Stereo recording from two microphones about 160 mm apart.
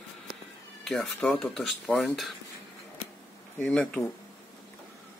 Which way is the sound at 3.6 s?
10° left (ahead or behind).